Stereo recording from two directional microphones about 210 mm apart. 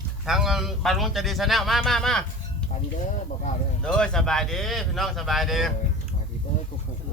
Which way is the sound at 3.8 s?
5° left (ahead or behind).